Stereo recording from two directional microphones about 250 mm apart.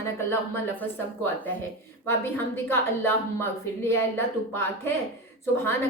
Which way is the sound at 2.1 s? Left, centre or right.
Centre.